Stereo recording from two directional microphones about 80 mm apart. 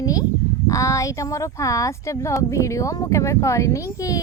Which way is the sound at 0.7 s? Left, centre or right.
Left.